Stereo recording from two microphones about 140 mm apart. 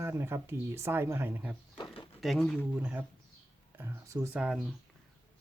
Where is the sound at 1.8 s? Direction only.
40° left (ahead or behind).